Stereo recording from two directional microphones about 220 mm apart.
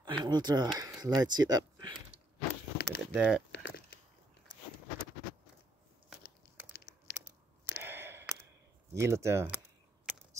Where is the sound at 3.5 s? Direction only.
45° left (ahead or behind).